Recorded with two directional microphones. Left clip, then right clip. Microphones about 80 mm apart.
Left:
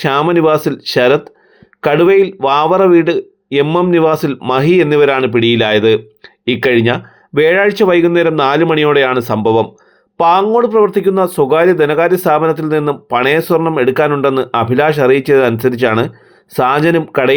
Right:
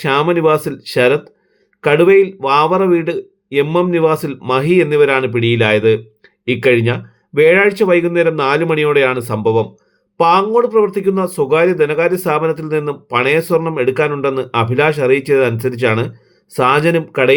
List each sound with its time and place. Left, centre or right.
0.0 s speech: left